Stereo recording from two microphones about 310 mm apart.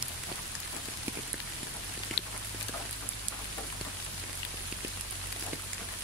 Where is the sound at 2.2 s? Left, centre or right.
Left.